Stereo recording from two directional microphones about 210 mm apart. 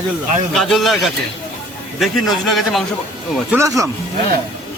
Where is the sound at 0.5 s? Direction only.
Centre (ahead or behind).